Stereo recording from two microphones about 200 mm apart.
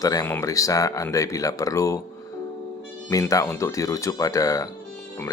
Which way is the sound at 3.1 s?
15° left (ahead or behind).